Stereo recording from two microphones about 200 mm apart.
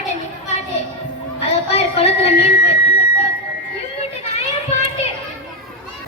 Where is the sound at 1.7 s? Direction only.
30° left (ahead or behind).